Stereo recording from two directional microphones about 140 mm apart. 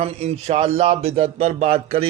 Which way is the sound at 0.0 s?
50° right (ahead or behind).